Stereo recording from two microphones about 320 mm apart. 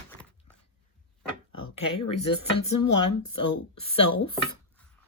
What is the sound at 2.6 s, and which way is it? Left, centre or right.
Speech, left.